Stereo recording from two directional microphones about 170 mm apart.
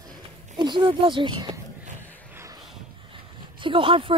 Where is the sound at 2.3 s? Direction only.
20° right (ahead or behind).